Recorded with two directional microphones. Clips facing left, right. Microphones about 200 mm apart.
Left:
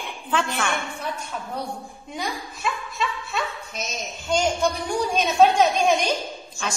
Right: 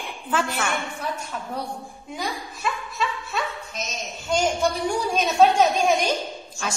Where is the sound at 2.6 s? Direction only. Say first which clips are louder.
Even; centre (ahead or behind).